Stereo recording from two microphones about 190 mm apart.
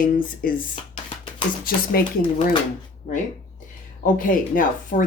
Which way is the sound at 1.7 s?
50° left (ahead or behind).